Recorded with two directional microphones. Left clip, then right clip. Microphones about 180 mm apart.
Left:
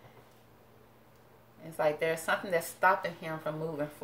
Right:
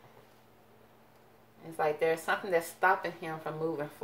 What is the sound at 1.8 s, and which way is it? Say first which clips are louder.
A woman's voice: even; 30° right (ahead or behind).